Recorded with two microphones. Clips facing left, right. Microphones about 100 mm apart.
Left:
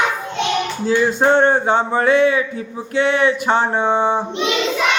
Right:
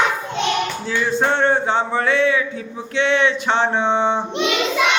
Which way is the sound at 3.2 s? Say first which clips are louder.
Left 2 dB; 40° left (ahead or behind).